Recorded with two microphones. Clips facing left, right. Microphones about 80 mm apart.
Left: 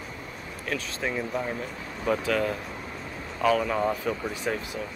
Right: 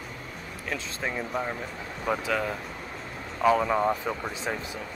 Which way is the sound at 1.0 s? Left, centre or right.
Centre.